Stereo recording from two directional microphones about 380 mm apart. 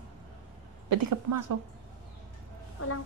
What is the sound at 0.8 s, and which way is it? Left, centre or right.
Speech, right.